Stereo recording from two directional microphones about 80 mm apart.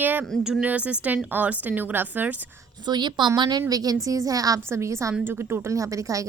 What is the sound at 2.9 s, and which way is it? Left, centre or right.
Speech, right.